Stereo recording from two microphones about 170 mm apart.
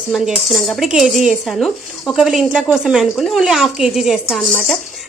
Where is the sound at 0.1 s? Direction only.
Centre (ahead or behind).